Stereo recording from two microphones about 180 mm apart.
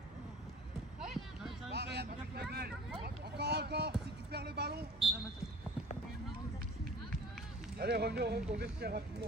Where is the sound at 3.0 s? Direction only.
65° right (ahead or behind).